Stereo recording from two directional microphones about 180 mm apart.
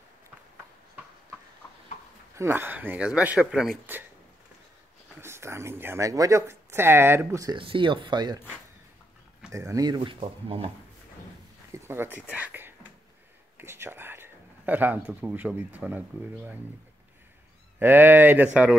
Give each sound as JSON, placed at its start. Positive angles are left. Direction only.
{"t": 2.3, "sound": "speech", "side_deg": -15}
{"t": 5.2, "sound": "speech", "side_deg": -15}
{"t": 9.5, "sound": "speech", "side_deg": -15}
{"t": 11.7, "sound": "speech", "side_deg": -15}
{"t": 17.7, "sound": "speech", "side_deg": -10}